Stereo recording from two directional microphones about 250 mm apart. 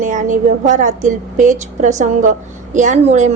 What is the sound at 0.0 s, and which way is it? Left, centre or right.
A woman's voice, right.